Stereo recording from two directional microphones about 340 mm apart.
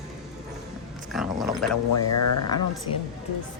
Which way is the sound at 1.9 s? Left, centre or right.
Left.